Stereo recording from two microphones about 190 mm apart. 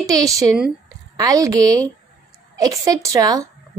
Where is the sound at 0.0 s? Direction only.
20° right (ahead or behind).